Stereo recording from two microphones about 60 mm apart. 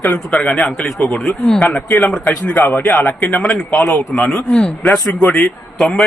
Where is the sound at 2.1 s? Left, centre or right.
Centre.